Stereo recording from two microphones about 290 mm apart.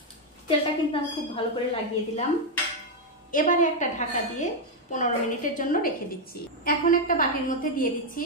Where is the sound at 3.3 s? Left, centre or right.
Left.